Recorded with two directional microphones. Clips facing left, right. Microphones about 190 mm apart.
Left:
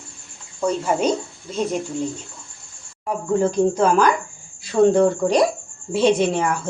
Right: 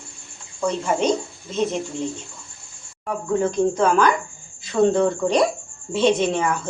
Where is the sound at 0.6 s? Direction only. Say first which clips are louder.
Left 1 dB; 10° left (ahead or behind).